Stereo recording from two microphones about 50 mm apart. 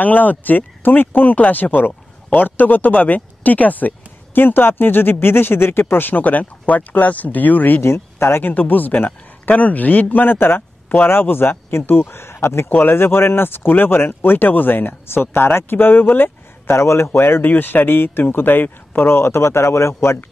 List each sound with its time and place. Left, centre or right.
0.0 s speech: left
7.8 s speech: left
8.5 s speech: left
12.6 s speech: left
12.9 s speech: left
16.7 s speech: left
17.5 s speech: left